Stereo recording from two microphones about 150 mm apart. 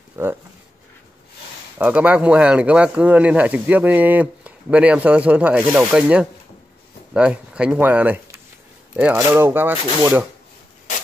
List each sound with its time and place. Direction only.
0.2 s speech: 15° right (ahead or behind)
1.8 s speech: 10° right (ahead or behind)